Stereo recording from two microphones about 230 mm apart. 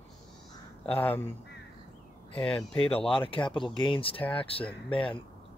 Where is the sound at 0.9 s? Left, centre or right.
Centre.